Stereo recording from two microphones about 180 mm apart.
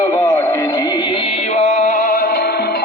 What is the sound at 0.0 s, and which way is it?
Music, 15° left (ahead or behind).